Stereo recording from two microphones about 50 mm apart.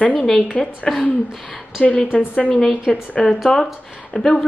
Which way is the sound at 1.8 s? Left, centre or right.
Left.